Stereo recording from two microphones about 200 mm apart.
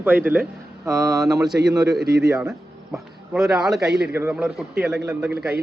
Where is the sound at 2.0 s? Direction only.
50° right (ahead or behind).